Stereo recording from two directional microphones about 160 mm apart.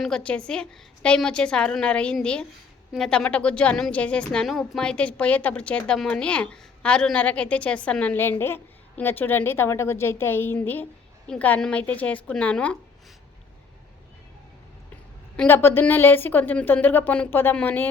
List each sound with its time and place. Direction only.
0.0 s a woman's voice: 5° left (ahead or behind)
15.4 s a woman's voice: 15° left (ahead or behind)